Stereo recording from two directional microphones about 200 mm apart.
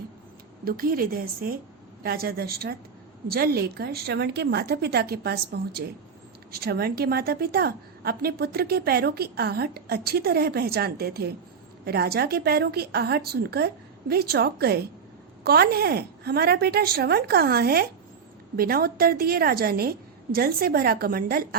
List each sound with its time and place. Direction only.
0.6 s a woman's voice: 45° right (ahead or behind)